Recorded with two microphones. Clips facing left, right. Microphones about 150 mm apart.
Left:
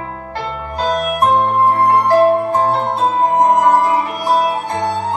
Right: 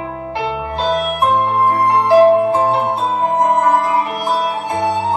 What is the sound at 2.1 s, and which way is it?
Music, 15° right (ahead or behind).